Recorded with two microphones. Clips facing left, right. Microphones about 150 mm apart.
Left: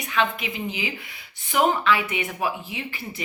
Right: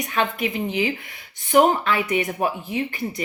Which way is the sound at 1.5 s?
40° right (ahead or behind).